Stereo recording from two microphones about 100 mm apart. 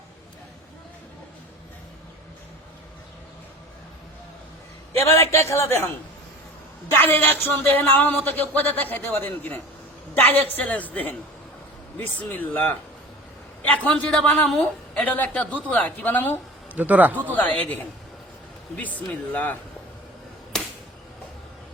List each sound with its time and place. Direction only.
5.0 s a man's voice: 30° left (ahead or behind)
6.9 s a man's voice: 20° left (ahead or behind)
13.7 s a man's voice: 10° left (ahead or behind)
16.7 s a man's voice: 15° right (ahead or behind)
17.3 s a man's voice: 15° left (ahead or behind)
18.8 s a man's voice: 15° left (ahead or behind)
20.5 s a sound: 5° left (ahead or behind)